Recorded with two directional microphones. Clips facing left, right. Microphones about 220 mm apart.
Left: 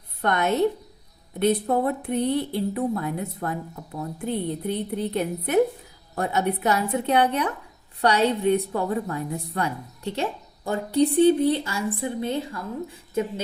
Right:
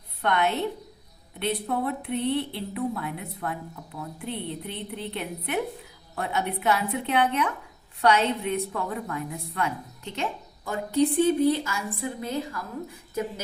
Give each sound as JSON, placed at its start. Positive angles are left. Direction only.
{"t": 0.2, "sound": "a woman's voice", "side_deg": 45}